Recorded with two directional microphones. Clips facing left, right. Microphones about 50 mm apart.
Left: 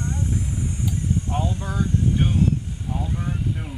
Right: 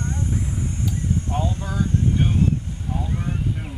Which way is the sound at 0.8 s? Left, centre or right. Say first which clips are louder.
Even; centre.